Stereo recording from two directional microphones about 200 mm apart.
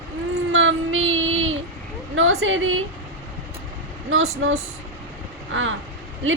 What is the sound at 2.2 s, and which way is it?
Speech, 75° right (ahead or behind).